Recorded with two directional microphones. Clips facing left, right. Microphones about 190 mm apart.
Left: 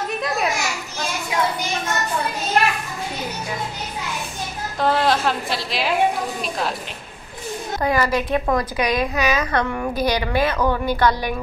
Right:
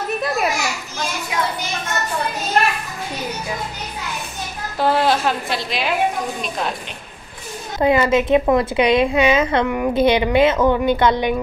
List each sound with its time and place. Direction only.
4.7 s a woman's voice: 5° right (ahead or behind)
7.8 s a woman's voice: 25° right (ahead or behind)